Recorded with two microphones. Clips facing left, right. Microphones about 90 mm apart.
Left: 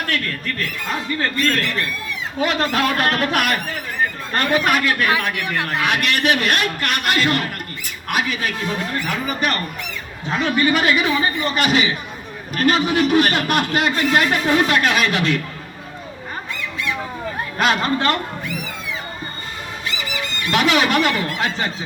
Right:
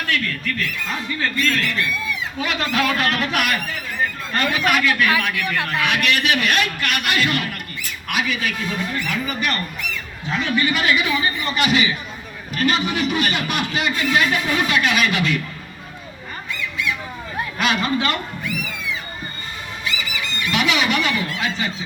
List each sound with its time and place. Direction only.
0.1 s a man's voice: 40° left (ahead or behind)
16.7 s a sound: 35° left (ahead or behind)
17.6 s a man's voice: 40° left (ahead or behind)
19.8 s speech: 40° left (ahead or behind)